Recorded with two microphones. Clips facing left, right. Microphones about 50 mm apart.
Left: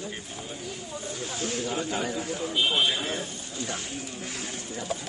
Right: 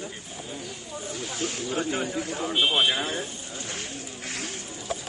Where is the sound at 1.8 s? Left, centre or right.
Right.